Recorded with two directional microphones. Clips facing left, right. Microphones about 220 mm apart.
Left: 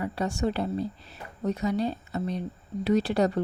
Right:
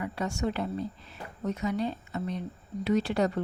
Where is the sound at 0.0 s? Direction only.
35° left (ahead or behind).